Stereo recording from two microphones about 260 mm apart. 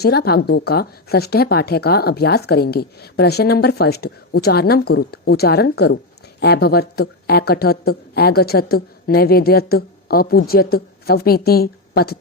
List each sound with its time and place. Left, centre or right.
0.0 s speech: left